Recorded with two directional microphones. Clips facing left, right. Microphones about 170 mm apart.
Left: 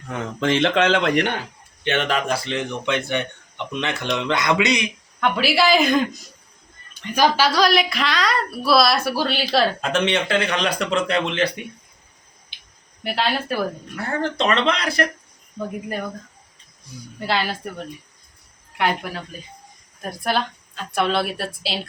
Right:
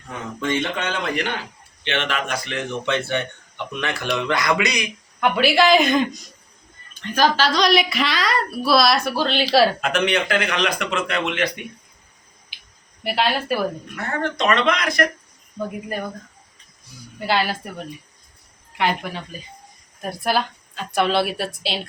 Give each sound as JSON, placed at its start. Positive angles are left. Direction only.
{"t": 0.3, "sound": "speech", "side_deg": 85}
{"t": 1.8, "sound": "speech", "side_deg": 40}
{"t": 2.8, "sound": "speech", "side_deg": 15}
{"t": 5.2, "sound": "a woman's voice", "side_deg": 0}
{"t": 7.0, "sound": "a woman's voice", "side_deg": 10}
{"t": 9.8, "sound": "speech", "side_deg": 25}
{"t": 13.0, "sound": "a woman's voice", "side_deg": 0}
{"t": 13.9, "sound": "speech", "side_deg": 30}
{"t": 17.2, "sound": "a woman's voice", "side_deg": 0}
{"t": 18.8, "sound": "a woman's voice", "side_deg": 0}